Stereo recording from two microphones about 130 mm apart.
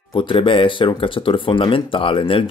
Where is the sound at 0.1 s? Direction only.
40° left (ahead or behind).